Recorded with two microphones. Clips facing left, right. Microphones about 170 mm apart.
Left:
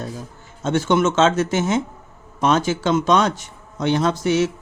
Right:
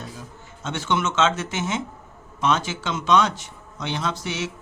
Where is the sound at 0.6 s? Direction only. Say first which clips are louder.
Left 7 dB; 40° left (ahead or behind).